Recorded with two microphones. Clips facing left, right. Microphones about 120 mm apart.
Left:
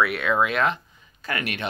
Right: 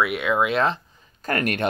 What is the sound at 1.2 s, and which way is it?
Speech, 45° right (ahead or behind).